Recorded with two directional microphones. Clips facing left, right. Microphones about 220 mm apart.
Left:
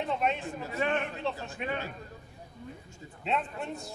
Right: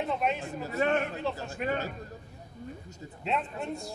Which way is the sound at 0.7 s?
40° right (ahead or behind).